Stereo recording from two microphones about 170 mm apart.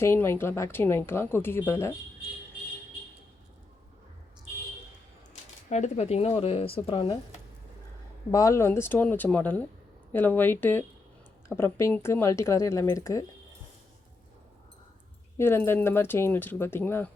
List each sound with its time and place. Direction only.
0.0 s speech: 15° left (ahead or behind)
5.6 s speech: 45° left (ahead or behind)
8.3 s speech: 20° left (ahead or behind)
15.4 s speech: 15° left (ahead or behind)